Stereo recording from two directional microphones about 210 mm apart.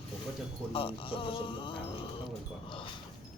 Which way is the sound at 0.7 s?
25° left (ahead or behind).